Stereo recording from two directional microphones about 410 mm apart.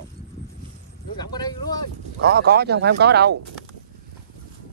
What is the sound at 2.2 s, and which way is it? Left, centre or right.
Speech, right.